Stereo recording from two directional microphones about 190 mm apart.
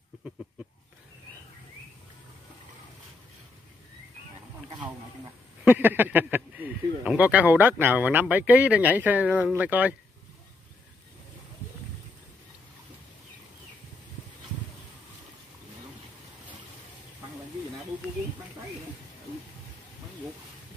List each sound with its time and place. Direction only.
5.6 s speech: 10° right (ahead or behind)